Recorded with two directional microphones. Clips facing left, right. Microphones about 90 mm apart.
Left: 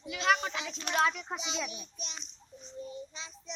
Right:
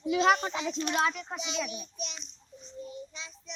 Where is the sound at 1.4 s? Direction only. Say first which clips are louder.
Right 3 dB; 25° left (ahead or behind).